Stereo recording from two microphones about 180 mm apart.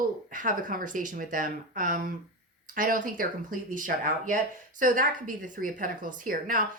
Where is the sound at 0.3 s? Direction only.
50° right (ahead or behind).